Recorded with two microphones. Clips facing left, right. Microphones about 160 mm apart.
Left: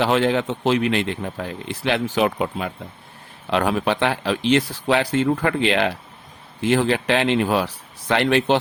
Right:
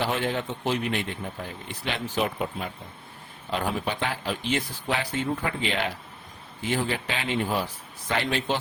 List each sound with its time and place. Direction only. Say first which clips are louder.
0.0 s speech: left 8 dB; 80° left